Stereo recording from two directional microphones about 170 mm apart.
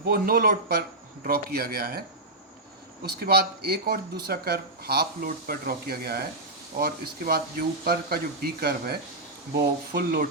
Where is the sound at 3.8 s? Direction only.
65° right (ahead or behind).